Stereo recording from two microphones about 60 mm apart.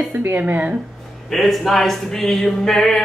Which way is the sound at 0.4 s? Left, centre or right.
Right.